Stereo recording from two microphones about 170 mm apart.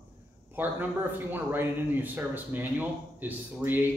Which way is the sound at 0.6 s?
10° right (ahead or behind).